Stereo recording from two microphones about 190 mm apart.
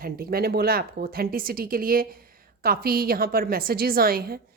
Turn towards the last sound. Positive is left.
turn(degrees=-50)  # may be behind; listen again after turning